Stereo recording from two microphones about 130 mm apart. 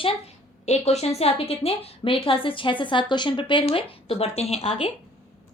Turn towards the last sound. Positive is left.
turn(degrees=50)  # may be behind; listen again after turning